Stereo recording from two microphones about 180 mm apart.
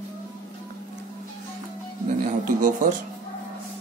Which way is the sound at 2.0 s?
45° right (ahead or behind).